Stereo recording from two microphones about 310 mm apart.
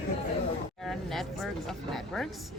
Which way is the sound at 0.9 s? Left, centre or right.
Centre.